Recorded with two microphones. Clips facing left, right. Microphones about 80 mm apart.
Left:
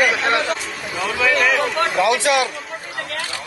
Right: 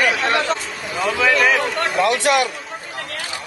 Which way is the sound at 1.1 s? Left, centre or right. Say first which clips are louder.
Right 1 dB; right.